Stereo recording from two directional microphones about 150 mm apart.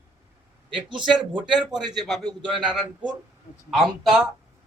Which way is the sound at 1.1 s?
30° right (ahead or behind).